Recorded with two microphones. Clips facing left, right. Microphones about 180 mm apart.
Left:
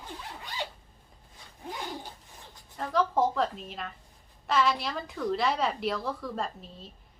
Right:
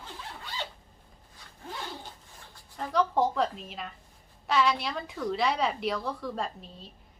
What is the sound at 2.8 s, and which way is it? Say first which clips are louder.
A woman's voice: even; centre (ahead or behind).